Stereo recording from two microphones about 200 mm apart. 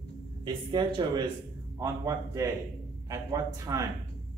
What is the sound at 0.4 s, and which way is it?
A man's voice, 25° right (ahead or behind).